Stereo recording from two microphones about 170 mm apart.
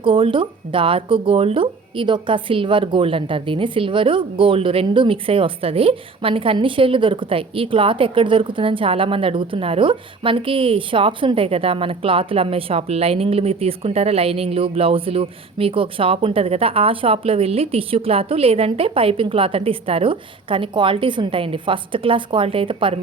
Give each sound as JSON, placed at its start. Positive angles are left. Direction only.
{"t": 0.0, "sound": "speech", "side_deg": -30}